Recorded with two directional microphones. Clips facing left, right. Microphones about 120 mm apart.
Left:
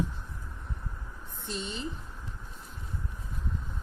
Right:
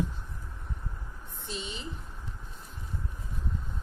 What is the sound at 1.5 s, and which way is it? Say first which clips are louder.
Speech: left 2 dB; 60° left (ahead or behind).